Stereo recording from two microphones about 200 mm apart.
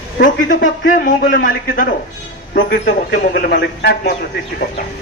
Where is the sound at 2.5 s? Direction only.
60° left (ahead or behind).